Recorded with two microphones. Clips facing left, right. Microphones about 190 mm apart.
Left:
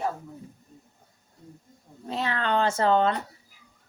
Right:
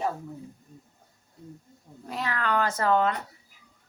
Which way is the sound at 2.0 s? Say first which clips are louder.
Left 2 dB; 25° left (ahead or behind).